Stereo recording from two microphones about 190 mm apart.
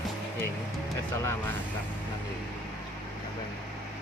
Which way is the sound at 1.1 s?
15° left (ahead or behind).